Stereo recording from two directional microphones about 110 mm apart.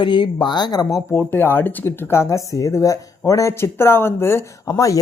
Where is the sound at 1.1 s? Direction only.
20° left (ahead or behind).